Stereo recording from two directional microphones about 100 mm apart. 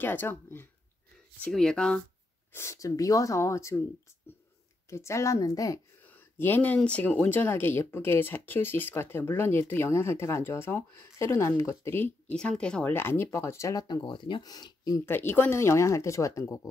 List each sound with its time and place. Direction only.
0.0 s speech: 20° left (ahead or behind)
1.4 s speech: 5° left (ahead or behind)
2.5 s speech: 30° left (ahead or behind)
4.8 s speech: 30° left (ahead or behind)
6.0 s speech: 20° left (ahead or behind)
12.4 s speech: 10° left (ahead or behind)
12.9 s speech: 25° left (ahead or behind); by 15.0 s 40° left (ahead or behind)
15.0 s speech: 20° left (ahead or behind)